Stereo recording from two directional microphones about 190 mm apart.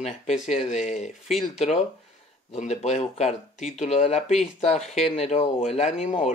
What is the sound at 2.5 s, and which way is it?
Speech, 35° left (ahead or behind).